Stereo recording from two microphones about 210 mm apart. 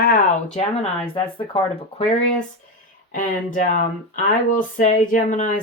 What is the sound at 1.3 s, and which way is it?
Speech, 25° left (ahead or behind).